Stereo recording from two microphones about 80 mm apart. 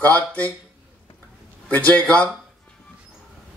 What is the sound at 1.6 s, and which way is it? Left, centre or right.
Speech, centre.